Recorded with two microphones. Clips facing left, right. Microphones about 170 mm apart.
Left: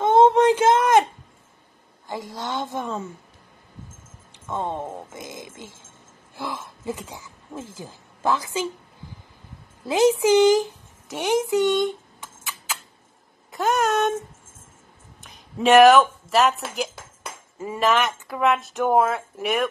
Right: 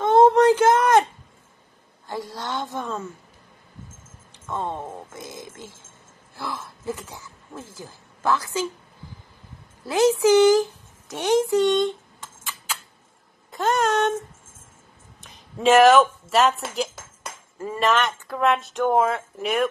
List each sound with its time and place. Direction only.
0.0 s a sound: 20° left (ahead or behind)
2.0 s speech: 15° left (ahead or behind)
4.5 s speech: 15° left (ahead or behind)
9.8 s a woman's voice: 20° left (ahead or behind)
13.5 s speech: centre (ahead or behind)
15.2 s speech: centre (ahead or behind)